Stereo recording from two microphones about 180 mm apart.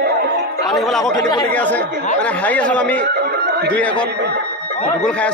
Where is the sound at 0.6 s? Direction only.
Centre (ahead or behind).